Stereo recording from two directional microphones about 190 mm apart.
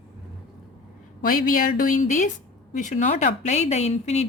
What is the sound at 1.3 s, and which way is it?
A woman's voice, 45° left (ahead or behind).